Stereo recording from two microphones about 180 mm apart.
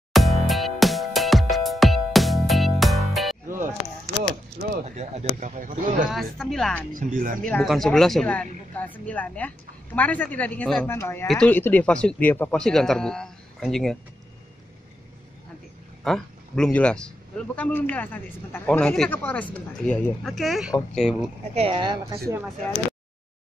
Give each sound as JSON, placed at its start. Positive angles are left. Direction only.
{"t": 0.1, "sound": "music", "side_deg": 0}
{"t": 3.4, "sound": "music", "side_deg": -50}
{"t": 4.9, "sound": "speech", "side_deg": -40}
{"t": 6.3, "sound": "speech", "side_deg": 0}
{"t": 6.9, "sound": "speech", "side_deg": -50}
{"t": 7.4, "sound": "a woman's voice", "side_deg": 0}
{"t": 16.0, "sound": "speech", "side_deg": 5}
{"t": 21.5, "sound": "speech", "side_deg": -30}